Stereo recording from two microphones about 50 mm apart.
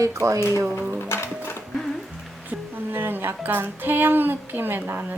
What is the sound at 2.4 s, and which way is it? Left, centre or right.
A woman's voice, right.